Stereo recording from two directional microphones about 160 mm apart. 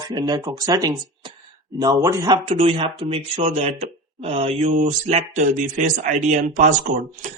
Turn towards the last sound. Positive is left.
turn(degrees=-55)  # may be behind; listen again after turning